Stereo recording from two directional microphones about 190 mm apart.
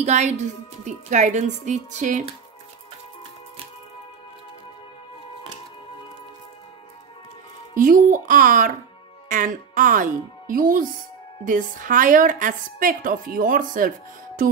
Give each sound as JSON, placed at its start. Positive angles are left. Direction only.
{"t": 0.0, "sound": "speech", "side_deg": -35}
{"t": 7.7, "sound": "a woman's voice", "side_deg": -45}